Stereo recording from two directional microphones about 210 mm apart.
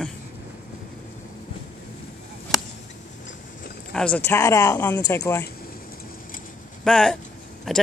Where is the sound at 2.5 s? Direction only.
Centre (ahead or behind).